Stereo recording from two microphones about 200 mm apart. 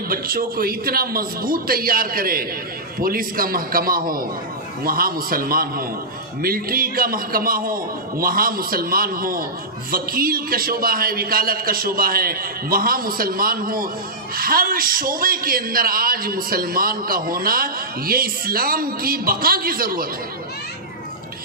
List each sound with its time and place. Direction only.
0.1 s a man's voice: 45° right (ahead or behind)